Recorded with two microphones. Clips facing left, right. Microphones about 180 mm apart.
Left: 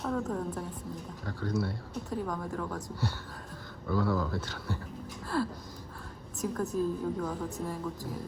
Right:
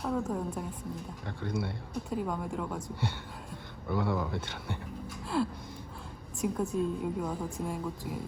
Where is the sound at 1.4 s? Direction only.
25° right (ahead or behind).